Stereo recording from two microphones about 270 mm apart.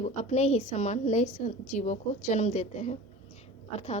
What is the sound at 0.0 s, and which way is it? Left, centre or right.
A woman's voice, left.